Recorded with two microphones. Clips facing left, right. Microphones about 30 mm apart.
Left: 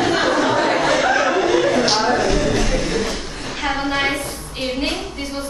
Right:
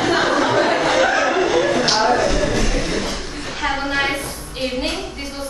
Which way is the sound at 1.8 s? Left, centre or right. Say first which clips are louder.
Even; centre.